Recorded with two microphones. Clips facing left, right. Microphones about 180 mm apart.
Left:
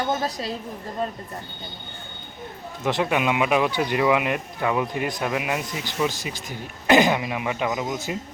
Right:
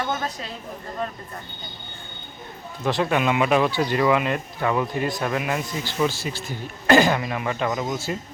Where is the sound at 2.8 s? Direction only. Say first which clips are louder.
Right 1 dB; 15° left (ahead or behind).